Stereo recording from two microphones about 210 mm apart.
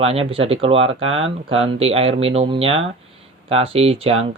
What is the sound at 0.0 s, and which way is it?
Speech, 30° right (ahead or behind).